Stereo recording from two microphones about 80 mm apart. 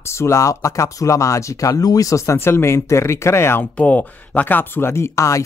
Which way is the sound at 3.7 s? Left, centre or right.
Centre.